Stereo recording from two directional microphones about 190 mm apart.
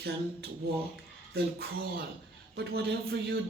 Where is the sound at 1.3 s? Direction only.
55° right (ahead or behind).